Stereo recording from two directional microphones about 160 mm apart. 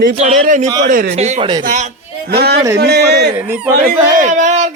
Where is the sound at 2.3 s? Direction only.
90° right.